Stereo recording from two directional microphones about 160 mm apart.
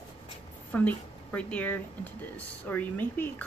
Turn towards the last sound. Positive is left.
turn(degrees=10)  # may be behind; listen again after turning